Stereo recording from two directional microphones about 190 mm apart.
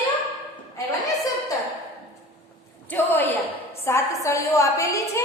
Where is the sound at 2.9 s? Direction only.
10° left (ahead or behind).